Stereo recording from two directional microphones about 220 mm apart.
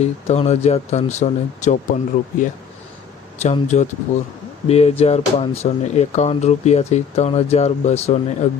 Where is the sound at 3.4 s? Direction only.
30° left (ahead or behind).